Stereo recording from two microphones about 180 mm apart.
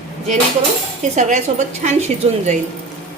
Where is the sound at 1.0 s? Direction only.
40° right (ahead or behind).